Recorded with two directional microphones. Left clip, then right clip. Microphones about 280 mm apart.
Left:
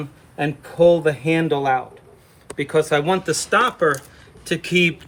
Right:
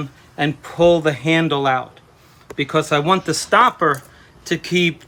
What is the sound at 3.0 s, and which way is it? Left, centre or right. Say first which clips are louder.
Speech: right 3 dB; right.